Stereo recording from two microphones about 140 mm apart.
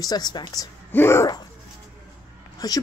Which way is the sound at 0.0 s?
30° left (ahead or behind).